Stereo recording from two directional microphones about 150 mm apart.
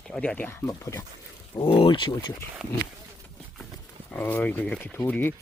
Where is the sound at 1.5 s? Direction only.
35° left (ahead or behind).